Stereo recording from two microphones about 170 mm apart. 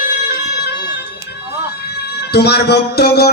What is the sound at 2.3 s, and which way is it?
Music, 75° left (ahead or behind).